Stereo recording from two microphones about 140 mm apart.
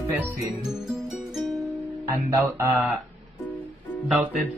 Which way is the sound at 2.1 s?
25° right (ahead or behind).